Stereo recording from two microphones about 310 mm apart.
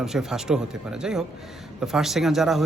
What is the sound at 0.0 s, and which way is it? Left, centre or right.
Speech, centre.